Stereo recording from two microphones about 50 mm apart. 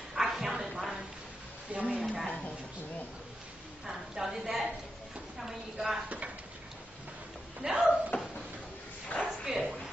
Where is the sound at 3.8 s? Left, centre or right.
Centre.